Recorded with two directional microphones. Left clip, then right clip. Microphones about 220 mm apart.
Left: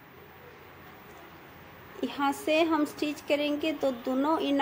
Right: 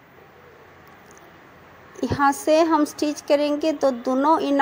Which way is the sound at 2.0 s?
30° right (ahead or behind).